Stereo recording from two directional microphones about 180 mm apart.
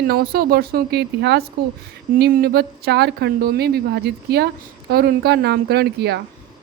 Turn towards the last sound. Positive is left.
turn(degrees=-65)  # may be behind; listen again after turning